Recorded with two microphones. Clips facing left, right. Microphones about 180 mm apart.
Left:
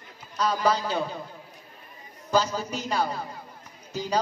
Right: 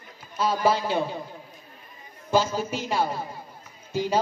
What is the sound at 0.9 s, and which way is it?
Speech, 20° right (ahead or behind).